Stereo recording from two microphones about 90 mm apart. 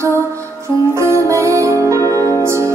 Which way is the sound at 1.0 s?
35° right (ahead or behind).